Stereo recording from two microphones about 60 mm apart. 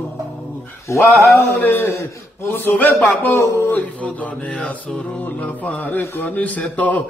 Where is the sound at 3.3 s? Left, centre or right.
Left.